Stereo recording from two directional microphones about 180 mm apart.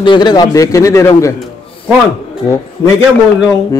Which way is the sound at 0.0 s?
25° left (ahead or behind).